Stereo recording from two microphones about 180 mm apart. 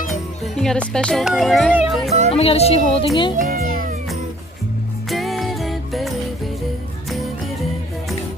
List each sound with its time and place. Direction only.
0.6 s speech: 5° left (ahead or behind)
2.3 s a woman's voice: 35° left (ahead or behind)
3.3 s music: 50° right (ahead or behind)
5.1 s music: centre (ahead or behind)